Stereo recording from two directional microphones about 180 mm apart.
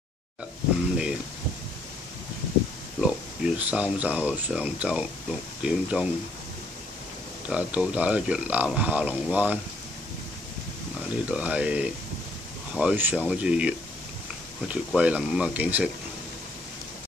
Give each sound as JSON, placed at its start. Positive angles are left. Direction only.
{"t": 3.0, "sound": "speech", "side_deg": -5}
{"t": 7.4, "sound": "a man's voice", "side_deg": -5}
{"t": 11.0, "sound": "a man's voice", "side_deg": -5}